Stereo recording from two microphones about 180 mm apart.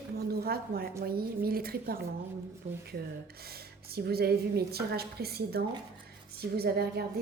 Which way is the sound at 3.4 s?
60° right (ahead or behind).